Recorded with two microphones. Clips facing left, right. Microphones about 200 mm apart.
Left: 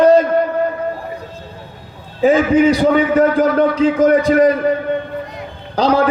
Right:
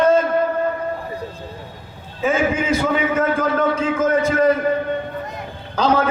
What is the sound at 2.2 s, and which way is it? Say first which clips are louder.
A man's voice: left 8 dB; 35° left (ahead or behind).